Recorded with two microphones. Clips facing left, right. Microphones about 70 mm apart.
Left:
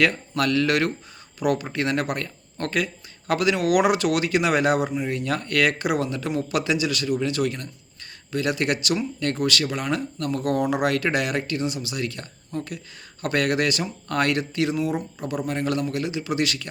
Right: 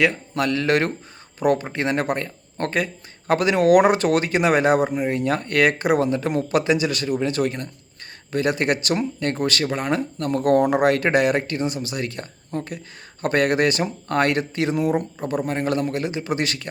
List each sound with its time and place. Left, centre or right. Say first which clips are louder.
0.0 s speech: right 1 dB; right